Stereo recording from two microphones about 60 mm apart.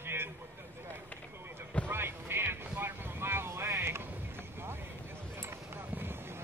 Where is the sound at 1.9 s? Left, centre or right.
Right.